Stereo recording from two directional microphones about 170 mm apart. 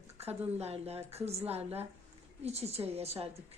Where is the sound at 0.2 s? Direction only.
40° right (ahead or behind).